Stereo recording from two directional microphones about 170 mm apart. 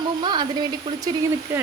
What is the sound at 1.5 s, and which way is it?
Speech, 10° right (ahead or behind).